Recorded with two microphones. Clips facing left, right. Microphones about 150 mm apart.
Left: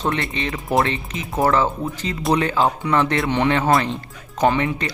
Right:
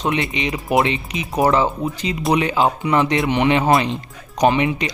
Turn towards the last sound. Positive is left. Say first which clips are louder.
# right 2 dB
turn(degrees=-15)  # may be behind; listen again after turning